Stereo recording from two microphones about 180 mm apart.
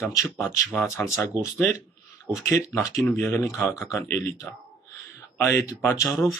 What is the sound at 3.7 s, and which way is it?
Speech, 5° right (ahead or behind).